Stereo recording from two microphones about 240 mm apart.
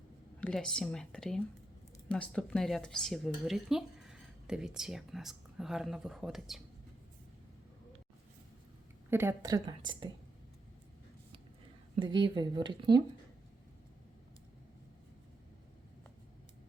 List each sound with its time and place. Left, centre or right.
0.3 s speech: centre
9.0 s a woman's voice: centre
11.9 s speech: centre